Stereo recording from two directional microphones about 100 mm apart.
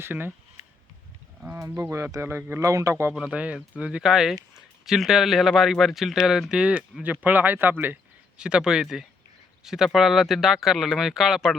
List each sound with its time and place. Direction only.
0.0 s speech: 20° right (ahead or behind)
1.5 s speech: 30° right (ahead or behind)
3.2 s speech: 10° right (ahead or behind)
8.4 s speech: 10° right (ahead or behind)